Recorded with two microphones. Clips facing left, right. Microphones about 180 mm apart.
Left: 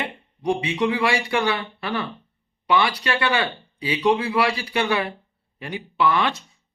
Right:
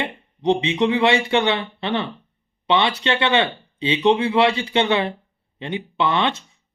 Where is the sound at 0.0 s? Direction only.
25° right (ahead or behind).